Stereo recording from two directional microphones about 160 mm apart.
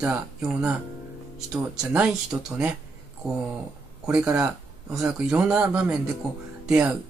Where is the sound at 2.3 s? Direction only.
15° right (ahead or behind).